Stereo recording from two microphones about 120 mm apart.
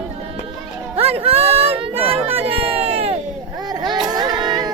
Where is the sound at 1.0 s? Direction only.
55° right (ahead or behind).